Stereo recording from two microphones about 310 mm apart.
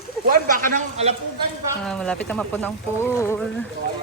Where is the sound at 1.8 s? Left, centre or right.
Centre.